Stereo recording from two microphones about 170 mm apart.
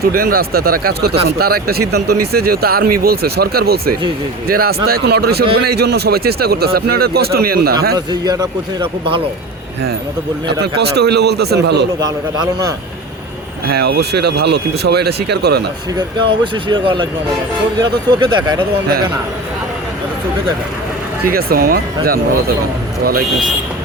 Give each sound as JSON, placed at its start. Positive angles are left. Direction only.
{"t": 0.0, "sound": "speech", "side_deg": -60}
{"t": 7.9, "sound": "a man's voice", "side_deg": -25}
{"t": 10.4, "sound": "speech", "side_deg": -75}
{"t": 13.7, "sound": "speech", "side_deg": -70}
{"t": 16.0, "sound": "a man's voice", "side_deg": -25}
{"t": 21.2, "sound": "speech", "side_deg": -60}